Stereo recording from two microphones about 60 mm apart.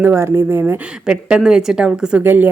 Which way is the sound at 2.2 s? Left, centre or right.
Right.